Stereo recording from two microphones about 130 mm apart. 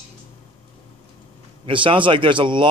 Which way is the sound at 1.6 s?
40° right (ahead or behind).